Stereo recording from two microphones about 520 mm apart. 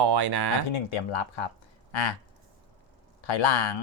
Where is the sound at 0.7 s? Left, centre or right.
Left.